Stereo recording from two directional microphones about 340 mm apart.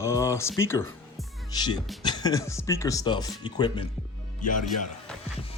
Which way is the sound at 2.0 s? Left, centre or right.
Centre.